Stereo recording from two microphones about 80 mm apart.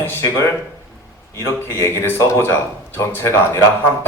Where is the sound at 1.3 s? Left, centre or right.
Left.